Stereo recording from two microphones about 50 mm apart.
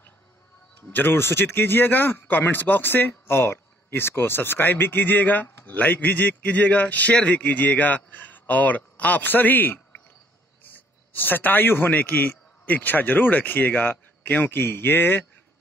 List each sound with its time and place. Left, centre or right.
0.9 s speech: left
3.1 s a man's voice: left